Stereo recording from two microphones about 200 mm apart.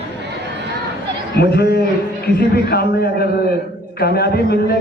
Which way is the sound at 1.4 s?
55° left (ahead or behind).